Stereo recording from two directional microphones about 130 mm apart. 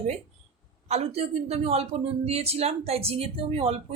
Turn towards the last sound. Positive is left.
turn(degrees=-50)  # may be behind; listen again after turning